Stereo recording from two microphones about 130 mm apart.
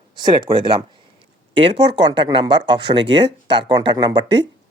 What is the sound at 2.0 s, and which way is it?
Speech, 35° right (ahead or behind).